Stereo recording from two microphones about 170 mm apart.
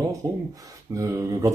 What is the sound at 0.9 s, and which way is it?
Speech, 20° right (ahead or behind).